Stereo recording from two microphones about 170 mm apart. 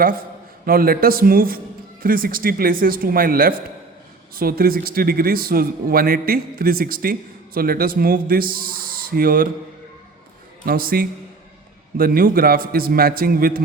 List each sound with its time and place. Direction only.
0.0 s a man's voice: 60° right (ahead or behind)
10.7 s a man's voice: 60° right (ahead or behind)